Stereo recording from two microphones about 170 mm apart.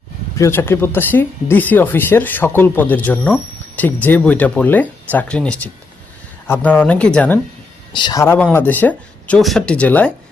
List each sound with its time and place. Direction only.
0.3 s speech: 15° left (ahead or behind)
7.9 s speech: 25° left (ahead or behind)
8.2 s speech: 15° left (ahead or behind)